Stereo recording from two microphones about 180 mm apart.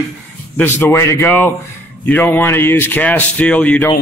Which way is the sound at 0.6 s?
10° left (ahead or behind).